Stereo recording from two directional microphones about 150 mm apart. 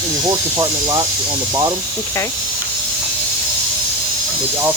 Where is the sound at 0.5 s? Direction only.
25° right (ahead or behind).